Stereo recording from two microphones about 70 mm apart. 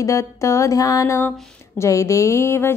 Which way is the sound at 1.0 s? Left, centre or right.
Left.